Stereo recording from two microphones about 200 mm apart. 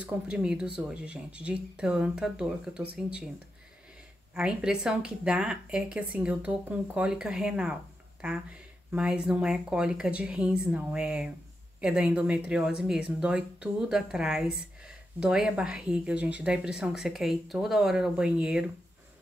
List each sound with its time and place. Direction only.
0.0 s a woman's voice: 5° right (ahead or behind)
4.4 s a woman's voice: 5° right (ahead or behind)
8.9 s a woman's voice: 5° right (ahead or behind)